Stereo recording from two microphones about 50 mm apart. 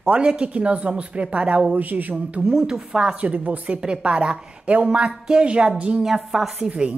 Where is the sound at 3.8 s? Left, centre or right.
Centre.